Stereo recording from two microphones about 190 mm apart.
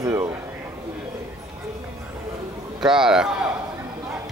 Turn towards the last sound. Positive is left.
turn(degrees=-5)  # may be behind; listen again after turning